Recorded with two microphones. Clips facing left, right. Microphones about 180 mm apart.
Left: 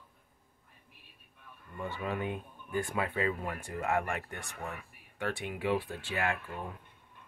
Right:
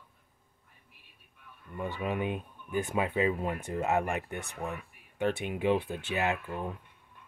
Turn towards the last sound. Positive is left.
turn(degrees=-20)  # may be behind; listen again after turning